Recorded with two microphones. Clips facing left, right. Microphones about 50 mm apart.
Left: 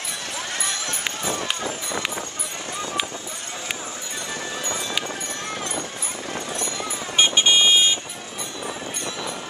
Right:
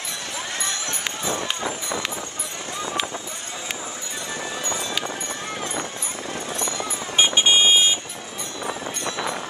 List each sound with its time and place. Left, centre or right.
1.3 s run: right
6.5 s clip-clop: centre
7.2 s vehicle: centre